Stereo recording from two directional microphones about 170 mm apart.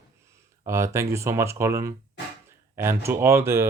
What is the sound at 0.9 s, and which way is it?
Speech, 15° right (ahead or behind).